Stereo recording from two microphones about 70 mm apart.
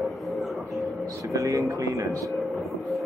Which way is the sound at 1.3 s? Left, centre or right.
Right.